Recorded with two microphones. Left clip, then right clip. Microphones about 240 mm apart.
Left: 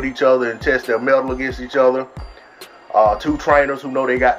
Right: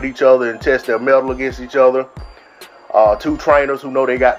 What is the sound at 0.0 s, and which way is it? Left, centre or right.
Speech, centre.